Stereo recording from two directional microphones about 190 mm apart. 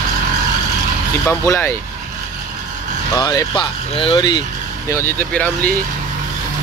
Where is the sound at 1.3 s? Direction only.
10° left (ahead or behind).